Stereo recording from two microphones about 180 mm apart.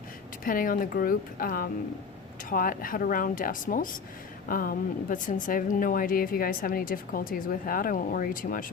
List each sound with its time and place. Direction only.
0.4 s a woman's voice: 50° left (ahead or behind)